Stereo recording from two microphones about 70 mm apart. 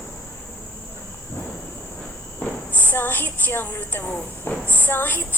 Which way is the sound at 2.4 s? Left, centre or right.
Left.